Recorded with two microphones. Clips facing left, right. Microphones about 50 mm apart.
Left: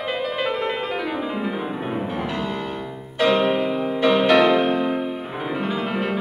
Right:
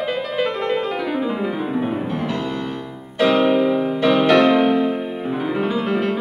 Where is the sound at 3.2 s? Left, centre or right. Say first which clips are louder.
Right 3 dB; centre.